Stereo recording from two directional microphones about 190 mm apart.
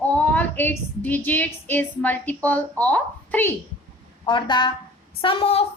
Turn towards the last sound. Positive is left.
turn(degrees=30)  # may be behind; listen again after turning